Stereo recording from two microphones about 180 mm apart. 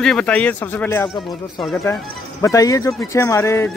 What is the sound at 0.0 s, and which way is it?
Speech, 5° left (ahead or behind).